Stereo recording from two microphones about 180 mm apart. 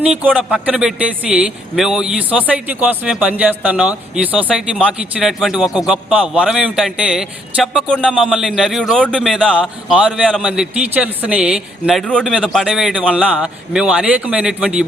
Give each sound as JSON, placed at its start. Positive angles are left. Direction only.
{"t": 0.3, "sound": "a man's voice", "side_deg": 0}